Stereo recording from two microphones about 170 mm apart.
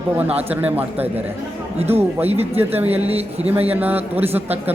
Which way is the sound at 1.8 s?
40° right (ahead or behind).